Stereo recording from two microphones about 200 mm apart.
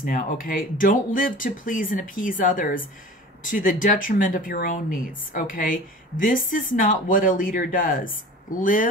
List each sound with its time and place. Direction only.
0.0 s speech: 45° left (ahead or behind)